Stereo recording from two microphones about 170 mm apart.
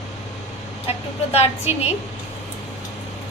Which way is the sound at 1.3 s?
40° left (ahead or behind).